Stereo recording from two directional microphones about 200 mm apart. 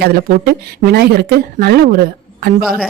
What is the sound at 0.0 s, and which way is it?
Speech, 50° right (ahead or behind).